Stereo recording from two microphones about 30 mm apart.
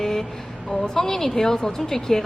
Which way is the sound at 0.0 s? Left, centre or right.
Centre.